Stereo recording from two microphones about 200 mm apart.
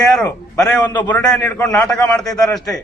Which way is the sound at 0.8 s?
20° left (ahead or behind).